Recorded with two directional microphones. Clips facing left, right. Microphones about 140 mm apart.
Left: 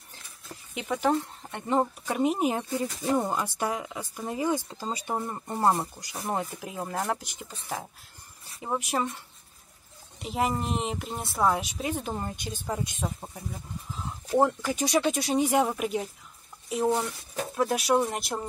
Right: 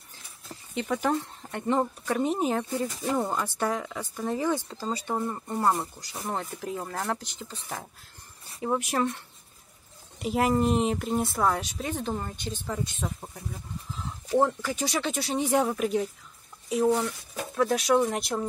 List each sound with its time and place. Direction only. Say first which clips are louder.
0.7 s speech: left 1 dB; 5° left (ahead or behind)
14.4 s speech: left 4 dB; 15° left (ahead or behind)
17.6 s speech: right 2 dB; 5° left (ahead or behind)